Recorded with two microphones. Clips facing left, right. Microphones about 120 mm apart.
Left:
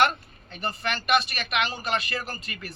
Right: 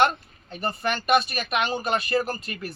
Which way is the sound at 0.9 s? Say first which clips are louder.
Right 3 dB; 35° right (ahead or behind).